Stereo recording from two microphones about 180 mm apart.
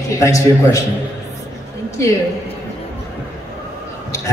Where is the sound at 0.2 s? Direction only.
15° left (ahead or behind).